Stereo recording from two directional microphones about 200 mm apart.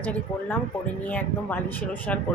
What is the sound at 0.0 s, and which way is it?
Speech, 5° left (ahead or behind).